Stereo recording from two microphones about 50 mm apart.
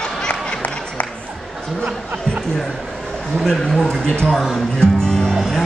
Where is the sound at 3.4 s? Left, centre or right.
Centre.